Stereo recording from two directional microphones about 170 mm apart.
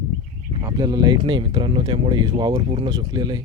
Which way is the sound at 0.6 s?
25° right (ahead or behind).